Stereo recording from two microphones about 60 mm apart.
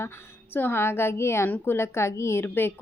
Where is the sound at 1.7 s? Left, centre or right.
Left.